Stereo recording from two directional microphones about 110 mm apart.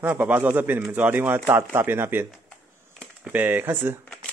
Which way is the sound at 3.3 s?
15° right (ahead or behind).